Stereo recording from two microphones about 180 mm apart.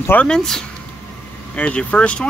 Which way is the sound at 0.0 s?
10° left (ahead or behind).